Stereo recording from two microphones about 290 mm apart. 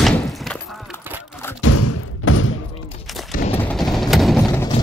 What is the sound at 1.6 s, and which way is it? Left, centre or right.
Thump, left.